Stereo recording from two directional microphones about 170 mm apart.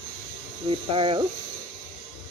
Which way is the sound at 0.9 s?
30° right (ahead or behind).